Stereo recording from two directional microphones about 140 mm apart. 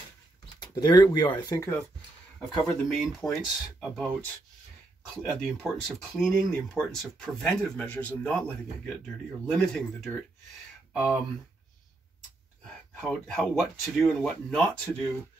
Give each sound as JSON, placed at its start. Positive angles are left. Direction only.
{"t": 0.6, "sound": "speech", "side_deg": 30}
{"t": 2.3, "sound": "speech", "side_deg": 5}
{"t": 5.2, "sound": "speech", "side_deg": 5}
{"t": 12.6, "sound": "speech", "side_deg": 5}